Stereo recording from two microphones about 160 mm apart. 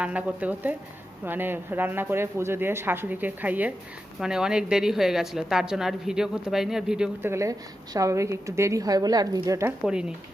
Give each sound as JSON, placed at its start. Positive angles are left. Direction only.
{"t": 0.0, "sound": "a woman's voice", "side_deg": -10}
{"t": 7.3, "sound": "a woman's voice", "side_deg": -20}
{"t": 9.8, "sound": "a woman's voice", "side_deg": -5}